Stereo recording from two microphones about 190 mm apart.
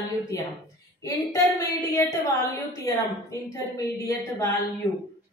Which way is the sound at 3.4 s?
15° left (ahead or behind).